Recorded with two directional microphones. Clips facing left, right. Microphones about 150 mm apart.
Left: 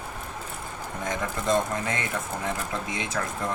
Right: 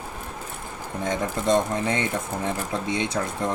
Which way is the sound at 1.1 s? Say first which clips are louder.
Right 4 dB; 30° right (ahead or behind).